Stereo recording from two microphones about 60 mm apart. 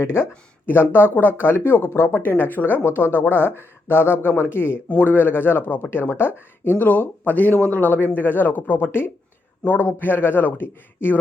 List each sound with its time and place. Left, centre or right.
0.0 s speech: left